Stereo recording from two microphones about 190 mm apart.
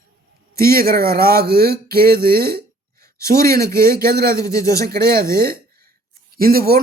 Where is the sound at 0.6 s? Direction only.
50° right (ahead or behind).